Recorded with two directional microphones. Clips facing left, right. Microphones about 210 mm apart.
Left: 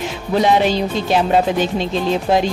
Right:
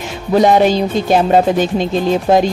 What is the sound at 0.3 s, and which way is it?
Speech, 45° right (ahead or behind).